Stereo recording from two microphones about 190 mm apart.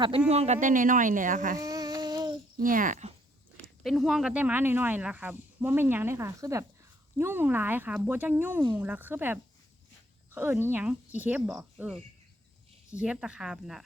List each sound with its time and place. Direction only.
0.3 s speech: 35° right (ahead or behind)
1.5 s a sound: 20° right (ahead or behind)
2.6 s speech: 45° right (ahead or behind)
3.6 s a woman's voice: centre (ahead or behind)